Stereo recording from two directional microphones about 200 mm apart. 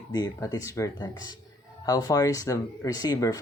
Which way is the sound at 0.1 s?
20° left (ahead or behind).